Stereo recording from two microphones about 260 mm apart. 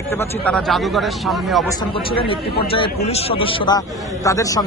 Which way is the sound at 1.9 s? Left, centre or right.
Centre.